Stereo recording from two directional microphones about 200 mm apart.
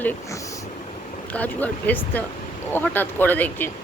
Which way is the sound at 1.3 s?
10° left (ahead or behind).